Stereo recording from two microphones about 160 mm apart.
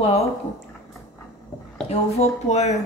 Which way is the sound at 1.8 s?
45° left (ahead or behind).